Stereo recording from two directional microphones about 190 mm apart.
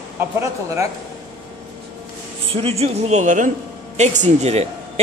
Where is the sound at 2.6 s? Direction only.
35° right (ahead or behind).